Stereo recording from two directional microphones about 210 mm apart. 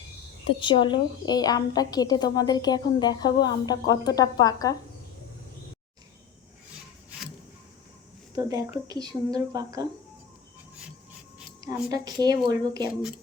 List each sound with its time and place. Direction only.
0.6 s a woman's voice: 20° left (ahead or behind)
8.4 s a woman's voice: 15° right (ahead or behind)
11.6 s a woman's voice: 15° right (ahead or behind)